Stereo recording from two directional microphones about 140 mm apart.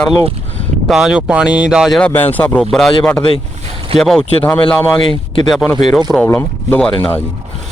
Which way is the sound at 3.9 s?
5° left (ahead or behind).